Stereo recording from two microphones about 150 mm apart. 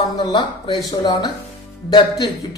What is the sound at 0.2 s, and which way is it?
A man's voice, 30° left (ahead or behind).